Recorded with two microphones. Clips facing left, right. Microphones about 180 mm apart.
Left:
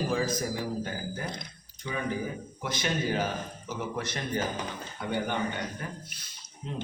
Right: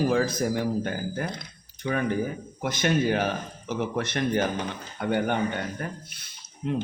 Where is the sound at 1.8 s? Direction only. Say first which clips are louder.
Right 6 dB; 60° right (ahead or behind).